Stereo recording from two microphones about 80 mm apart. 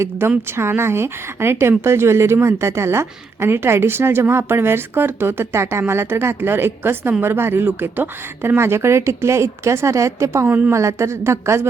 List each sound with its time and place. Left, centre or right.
0.0 s a woman's voice: right